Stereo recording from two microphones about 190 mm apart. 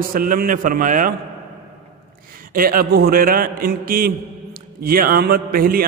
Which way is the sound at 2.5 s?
50° right (ahead or behind).